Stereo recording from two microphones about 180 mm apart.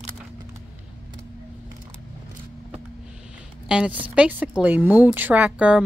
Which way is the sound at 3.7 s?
5° right (ahead or behind).